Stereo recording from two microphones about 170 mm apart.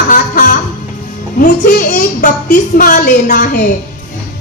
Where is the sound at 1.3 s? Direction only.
55° left (ahead or behind).